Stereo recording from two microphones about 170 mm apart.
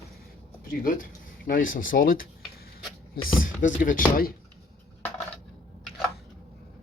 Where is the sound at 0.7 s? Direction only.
55° left (ahead or behind).